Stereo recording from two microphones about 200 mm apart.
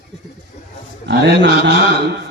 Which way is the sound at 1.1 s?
55° right (ahead or behind).